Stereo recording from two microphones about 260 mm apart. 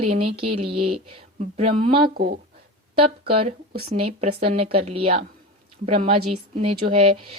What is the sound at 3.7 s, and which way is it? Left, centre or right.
Speech, right.